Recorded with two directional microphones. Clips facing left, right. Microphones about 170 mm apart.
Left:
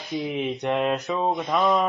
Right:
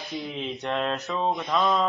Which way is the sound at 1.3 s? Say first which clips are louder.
Left 2 dB; 5° left (ahead or behind).